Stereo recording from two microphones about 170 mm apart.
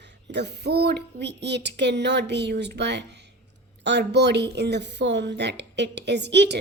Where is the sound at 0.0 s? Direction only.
90° right.